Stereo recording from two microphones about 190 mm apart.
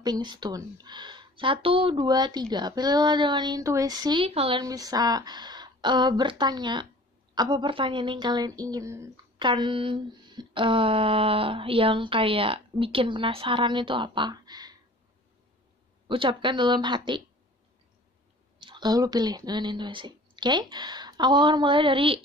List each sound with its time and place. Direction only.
0.0 s a woman's voice: 20° right (ahead or behind)
16.1 s a woman's voice: 25° right (ahead or behind)
18.6 s speech: 25° right (ahead or behind)